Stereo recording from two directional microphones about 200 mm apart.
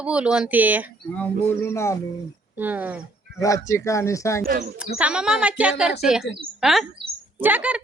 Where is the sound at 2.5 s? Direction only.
10° right (ahead or behind).